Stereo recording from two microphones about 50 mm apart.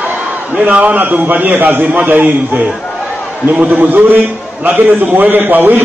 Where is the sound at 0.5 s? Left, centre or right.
Right.